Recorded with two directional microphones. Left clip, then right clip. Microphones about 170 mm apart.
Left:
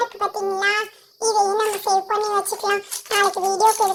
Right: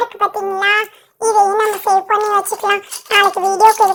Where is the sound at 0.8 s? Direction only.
35° right (ahead or behind).